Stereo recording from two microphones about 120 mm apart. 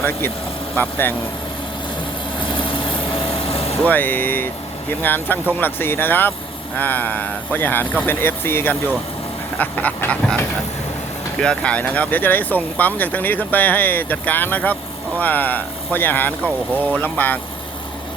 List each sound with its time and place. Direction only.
0.8 s speech: 15° left (ahead or behind)
2.4 s vehicle: 45° left (ahead or behind)
3.8 s speech: 15° left (ahead or behind)
11.3 s speech: 10° left (ahead or behind)